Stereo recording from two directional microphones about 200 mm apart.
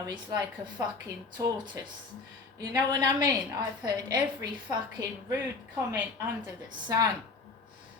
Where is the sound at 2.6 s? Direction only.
20° right (ahead or behind).